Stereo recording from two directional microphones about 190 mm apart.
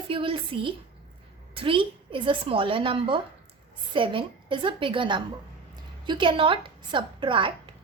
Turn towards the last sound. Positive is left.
turn(degrees=-25)  # may be behind; listen again after turning